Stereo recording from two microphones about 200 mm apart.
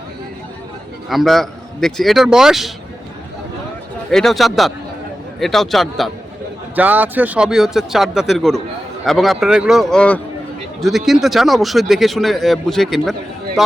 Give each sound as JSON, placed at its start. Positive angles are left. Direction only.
{"t": 1.1, "sound": "speech", "side_deg": 0}
{"t": 4.1, "sound": "speech", "side_deg": 0}